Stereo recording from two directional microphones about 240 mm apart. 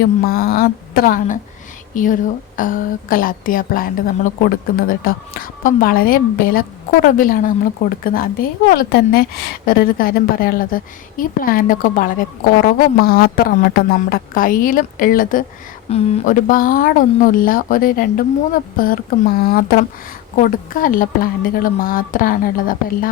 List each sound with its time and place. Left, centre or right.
0.0 s a woman's voice: left
2.6 s a woman's voice: left